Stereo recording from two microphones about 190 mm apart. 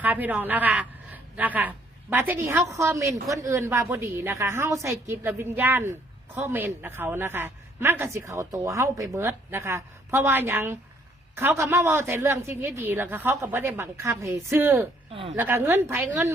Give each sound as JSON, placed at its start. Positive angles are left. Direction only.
{"t": 0.0, "sound": "a woman's voice", "side_deg": -10}
{"t": 15.1, "sound": "a woman's voice", "side_deg": -30}
{"t": 15.4, "sound": "a woman's voice", "side_deg": -10}